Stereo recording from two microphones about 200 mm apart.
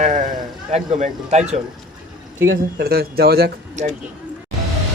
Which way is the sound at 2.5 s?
50° right (ahead or behind).